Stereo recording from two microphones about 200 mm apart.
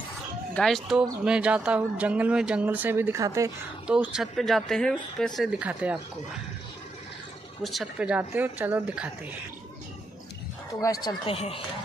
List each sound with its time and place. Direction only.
0.6 s speech: centre (ahead or behind)
7.6 s speech: centre (ahead or behind)
10.7 s speech: 15° left (ahead or behind)
11.2 s speech: 30° left (ahead or behind)